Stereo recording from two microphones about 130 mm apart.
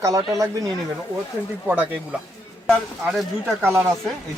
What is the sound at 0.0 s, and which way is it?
Speech, 25° right (ahead or behind).